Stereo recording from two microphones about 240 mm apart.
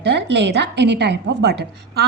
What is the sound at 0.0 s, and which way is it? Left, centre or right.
A woman's voice, right.